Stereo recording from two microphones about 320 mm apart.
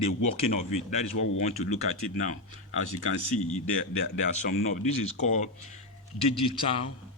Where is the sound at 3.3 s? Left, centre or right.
Left.